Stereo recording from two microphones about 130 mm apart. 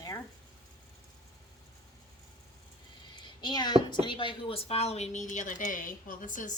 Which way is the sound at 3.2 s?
35° left (ahead or behind).